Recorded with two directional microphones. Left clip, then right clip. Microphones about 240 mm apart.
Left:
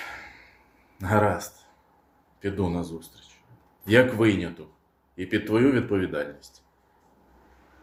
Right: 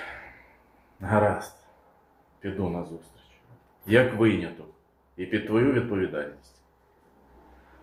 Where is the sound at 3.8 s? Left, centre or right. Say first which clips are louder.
Left 1 dB; left.